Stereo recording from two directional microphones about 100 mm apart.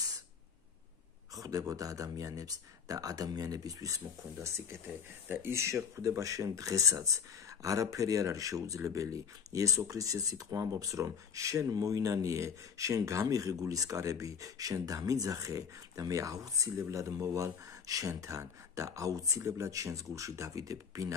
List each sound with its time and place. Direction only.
1.3 s speech: 35° right (ahead or behind)